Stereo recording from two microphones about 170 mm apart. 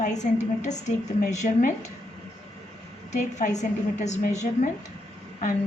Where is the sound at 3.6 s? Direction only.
45° left (ahead or behind).